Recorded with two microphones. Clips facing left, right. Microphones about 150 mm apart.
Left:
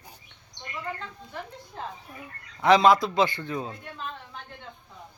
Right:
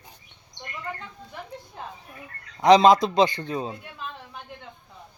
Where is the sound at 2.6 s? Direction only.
20° right (ahead or behind).